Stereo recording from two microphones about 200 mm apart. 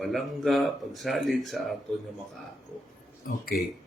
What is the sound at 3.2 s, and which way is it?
Speech, 45° left (ahead or behind).